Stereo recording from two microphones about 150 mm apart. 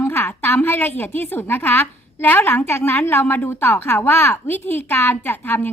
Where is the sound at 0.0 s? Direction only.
15° left (ahead or behind).